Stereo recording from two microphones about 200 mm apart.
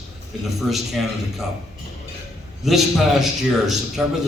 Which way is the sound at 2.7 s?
Centre (ahead or behind).